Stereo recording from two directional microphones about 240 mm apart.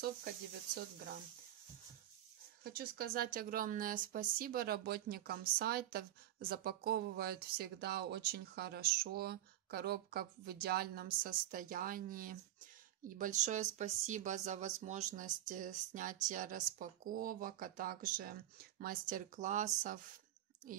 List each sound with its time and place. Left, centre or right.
2.6 s speech: right